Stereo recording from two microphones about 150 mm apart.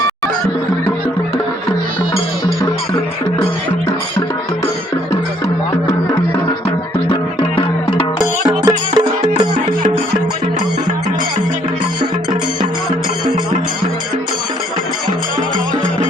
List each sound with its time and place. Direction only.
5.9 s music: 20° left (ahead or behind)
8.4 s music: 25° right (ahead or behind)